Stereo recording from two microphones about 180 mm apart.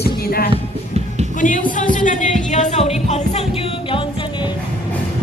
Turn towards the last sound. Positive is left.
turn(degrees=30)  # may be behind; listen again after turning